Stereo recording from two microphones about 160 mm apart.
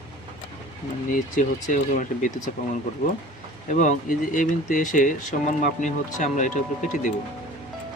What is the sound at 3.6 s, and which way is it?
Speech, 50° left (ahead or behind).